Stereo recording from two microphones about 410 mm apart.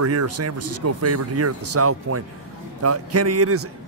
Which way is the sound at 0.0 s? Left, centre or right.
Right.